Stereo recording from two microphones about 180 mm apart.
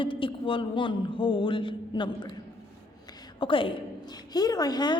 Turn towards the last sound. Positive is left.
turn(degrees=20)  # may be behind; listen again after turning